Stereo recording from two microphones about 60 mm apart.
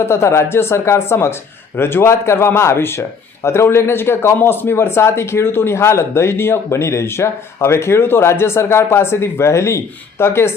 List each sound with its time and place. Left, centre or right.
0.0 s speech: left